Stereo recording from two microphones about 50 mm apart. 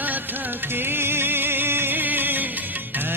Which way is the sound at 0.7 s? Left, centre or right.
Right.